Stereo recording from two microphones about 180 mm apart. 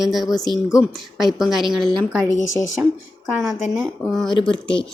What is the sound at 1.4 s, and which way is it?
Speech, centre (ahead or behind).